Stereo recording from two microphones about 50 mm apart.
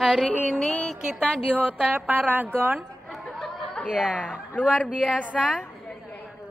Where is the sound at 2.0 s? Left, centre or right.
Right.